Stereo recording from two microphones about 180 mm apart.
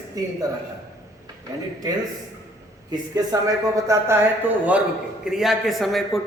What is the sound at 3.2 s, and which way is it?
A man's voice, 20° right (ahead or behind).